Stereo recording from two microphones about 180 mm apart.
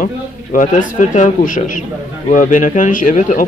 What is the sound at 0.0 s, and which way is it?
Speech, 50° left (ahead or behind).